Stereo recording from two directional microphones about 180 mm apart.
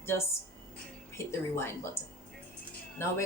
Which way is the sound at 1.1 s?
15° left (ahead or behind).